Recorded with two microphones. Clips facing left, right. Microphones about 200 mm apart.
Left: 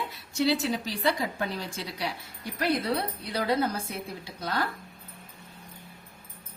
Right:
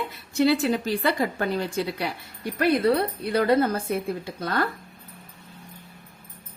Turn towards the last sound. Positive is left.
turn(degrees=-55)  # may be behind; listen again after turning